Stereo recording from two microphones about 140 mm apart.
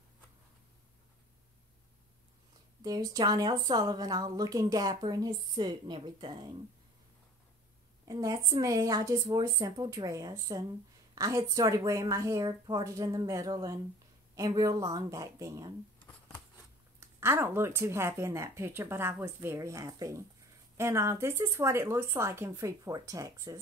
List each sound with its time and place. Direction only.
2.8 s speech: 25° right (ahead or behind)
8.0 s speech: 25° right (ahead or behind)
17.2 s speech: 15° right (ahead or behind)